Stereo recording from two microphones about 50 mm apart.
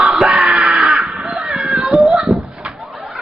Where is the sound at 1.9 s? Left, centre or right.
Centre.